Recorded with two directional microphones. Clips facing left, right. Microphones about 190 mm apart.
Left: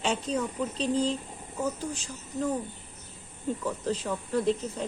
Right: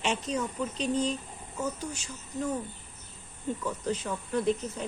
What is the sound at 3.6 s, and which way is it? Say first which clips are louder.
A woman's voice: left 1 dB; 35° left (ahead or behind).